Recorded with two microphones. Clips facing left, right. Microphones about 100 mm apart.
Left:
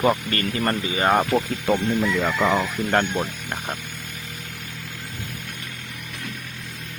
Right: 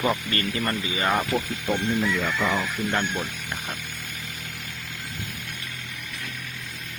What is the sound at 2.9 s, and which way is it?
Speech, 50° left (ahead or behind).